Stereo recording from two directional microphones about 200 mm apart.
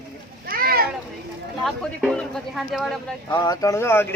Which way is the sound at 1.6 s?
Centre (ahead or behind).